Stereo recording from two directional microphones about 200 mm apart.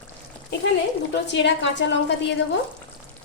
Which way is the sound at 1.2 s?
60° left (ahead or behind).